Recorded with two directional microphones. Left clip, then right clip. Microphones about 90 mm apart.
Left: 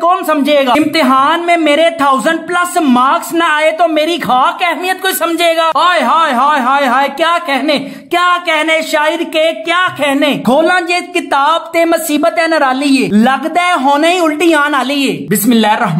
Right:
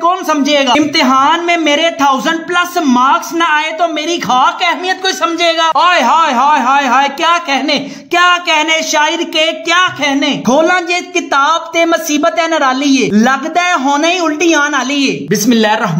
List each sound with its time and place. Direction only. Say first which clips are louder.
0.3 s a man's voice: left 1 dB; 5° left (ahead or behind)
1.7 s speech: even; 30° left (ahead or behind)
4.3 s speech: right 3 dB; 20° left (ahead or behind)
5.4 s a man's voice: even; 5° left (ahead or behind)
7.5 s speech: even; 5° left (ahead or behind)
9.8 s speech: right 1 dB; 25° left (ahead or behind)
10.4 s speech: right 1 dB; 10° left (ahead or behind)
11.3 s speech: even; 30° left (ahead or behind)
12.4 s a man's voice: left 1 dB; 5° left (ahead or behind)
13.7 s speech: left 3 dB; 35° left (ahead or behind)